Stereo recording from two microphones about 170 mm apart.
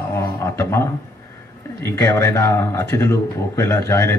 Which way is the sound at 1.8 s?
15° left (ahead or behind).